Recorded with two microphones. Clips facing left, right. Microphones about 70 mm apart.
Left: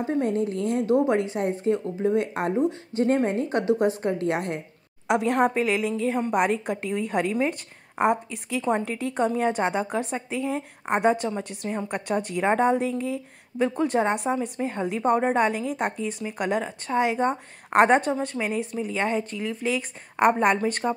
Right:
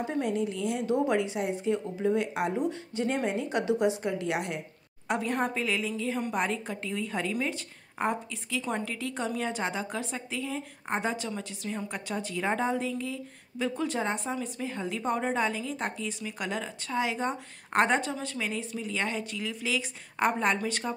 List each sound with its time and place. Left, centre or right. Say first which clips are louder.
0.0 s a woman's voice: left 5 dB; left
5.0 s a woman's voice: left 8 dB; left
5.5 s a woman's voice: left 6 dB; left
19.3 s a woman's voice: left 6 dB; left
20.2 s a woman's voice: left 7 dB; left